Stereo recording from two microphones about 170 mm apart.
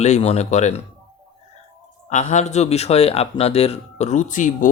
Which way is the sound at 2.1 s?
50° left (ahead or behind).